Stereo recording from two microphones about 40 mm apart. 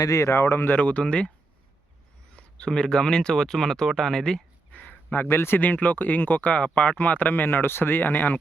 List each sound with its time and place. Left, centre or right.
0.4 s speech: left
0.7 s speech: left
2.3 s speech: left
4.7 s a sound: left
5.1 s speech: left
5.5 s speech: left
6.9 s speech: left